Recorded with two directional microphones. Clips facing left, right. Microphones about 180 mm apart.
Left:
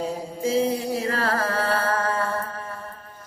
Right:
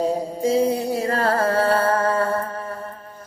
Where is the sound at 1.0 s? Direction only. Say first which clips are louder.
Right 4 dB; 35° right (ahead or behind).